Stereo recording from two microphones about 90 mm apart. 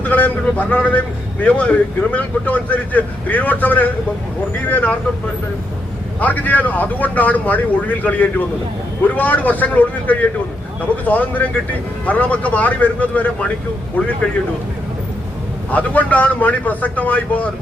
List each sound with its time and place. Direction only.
0.0 s a man's voice: 20° left (ahead or behind)
6.1 s a man's voice: 20° left (ahead or behind)
15.7 s a man's voice: 15° left (ahead or behind)